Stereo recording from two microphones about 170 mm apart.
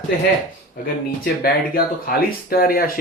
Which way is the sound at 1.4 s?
60° left (ahead or behind).